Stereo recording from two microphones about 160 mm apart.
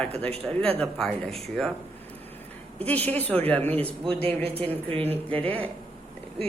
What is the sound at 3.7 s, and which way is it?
Speech, 35° right (ahead or behind).